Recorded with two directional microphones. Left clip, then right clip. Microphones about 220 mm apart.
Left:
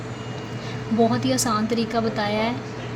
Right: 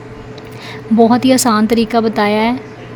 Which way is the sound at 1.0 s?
45° right (ahead or behind).